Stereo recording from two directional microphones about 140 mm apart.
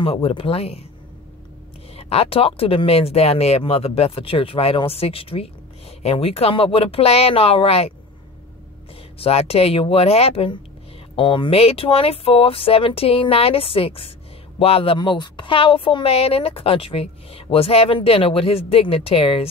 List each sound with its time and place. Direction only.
0.0 s speech: 40° left (ahead or behind)
2.0 s speech: 45° left (ahead or behind)
9.2 s speech: 45° left (ahead or behind)